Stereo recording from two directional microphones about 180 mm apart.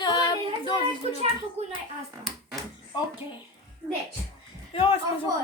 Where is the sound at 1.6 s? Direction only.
35° right (ahead or behind).